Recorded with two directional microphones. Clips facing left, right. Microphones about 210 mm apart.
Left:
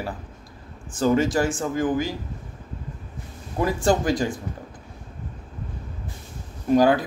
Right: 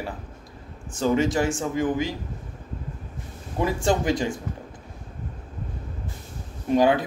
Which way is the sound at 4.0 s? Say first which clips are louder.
Left 1 dB; 25° right (ahead or behind).